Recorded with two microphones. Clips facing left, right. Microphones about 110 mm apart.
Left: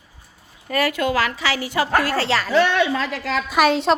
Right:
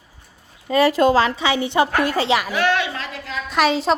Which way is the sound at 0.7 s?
25° right (ahead or behind).